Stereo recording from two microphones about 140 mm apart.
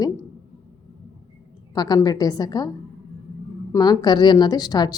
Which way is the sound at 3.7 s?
30° left (ahead or behind).